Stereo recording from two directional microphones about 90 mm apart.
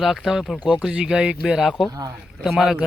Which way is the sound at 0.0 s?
5° right (ahead or behind).